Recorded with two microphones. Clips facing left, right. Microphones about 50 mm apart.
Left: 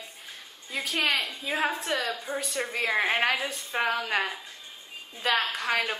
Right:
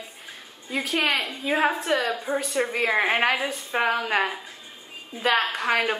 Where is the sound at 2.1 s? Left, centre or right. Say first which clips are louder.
Right 6 dB; centre.